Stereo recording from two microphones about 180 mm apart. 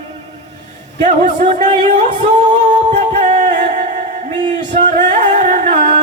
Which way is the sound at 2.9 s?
40° right (ahead or behind).